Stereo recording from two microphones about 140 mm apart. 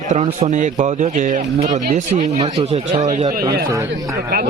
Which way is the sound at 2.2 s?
50° right (ahead or behind).